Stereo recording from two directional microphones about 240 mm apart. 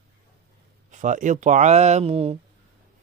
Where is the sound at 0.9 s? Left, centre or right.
Right.